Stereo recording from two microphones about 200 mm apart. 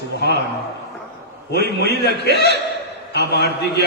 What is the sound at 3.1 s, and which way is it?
Mantra, 55° left (ahead or behind).